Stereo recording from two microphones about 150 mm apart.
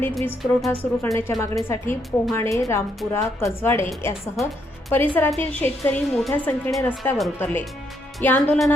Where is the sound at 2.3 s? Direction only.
20° left (ahead or behind).